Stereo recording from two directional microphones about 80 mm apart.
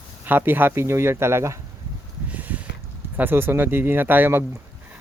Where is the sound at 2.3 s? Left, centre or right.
Centre.